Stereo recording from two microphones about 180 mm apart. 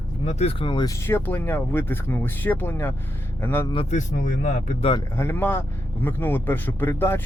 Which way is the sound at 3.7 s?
35° left (ahead or behind).